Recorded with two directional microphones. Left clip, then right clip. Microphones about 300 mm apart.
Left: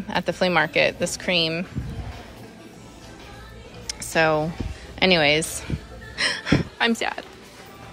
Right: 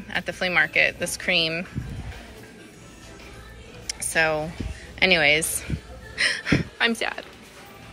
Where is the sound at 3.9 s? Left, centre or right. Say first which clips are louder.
Left 2 dB; centre.